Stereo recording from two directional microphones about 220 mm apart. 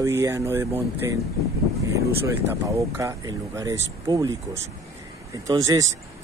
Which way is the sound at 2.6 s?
15° right (ahead or behind).